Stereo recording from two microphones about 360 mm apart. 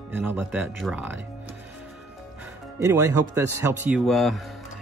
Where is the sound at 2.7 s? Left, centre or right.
Centre.